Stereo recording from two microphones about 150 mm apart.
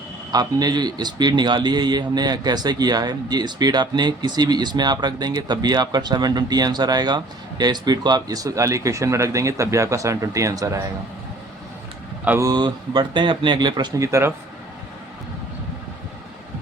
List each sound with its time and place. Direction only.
0.3 s a man's voice: 25° right (ahead or behind)
12.4 s a man's voice: 25° right (ahead or behind)